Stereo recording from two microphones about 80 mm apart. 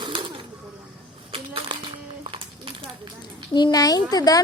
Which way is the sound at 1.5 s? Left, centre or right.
Right.